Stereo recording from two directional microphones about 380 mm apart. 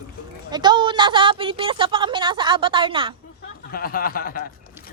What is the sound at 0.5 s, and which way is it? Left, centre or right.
A woman's voice, centre.